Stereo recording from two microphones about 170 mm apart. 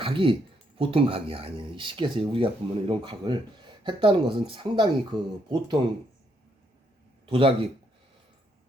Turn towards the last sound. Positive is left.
turn(degrees=-30)  # may be behind; listen again after turning